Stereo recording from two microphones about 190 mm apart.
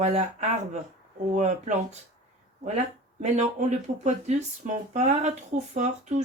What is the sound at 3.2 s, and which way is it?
Speech, 40° right (ahead or behind).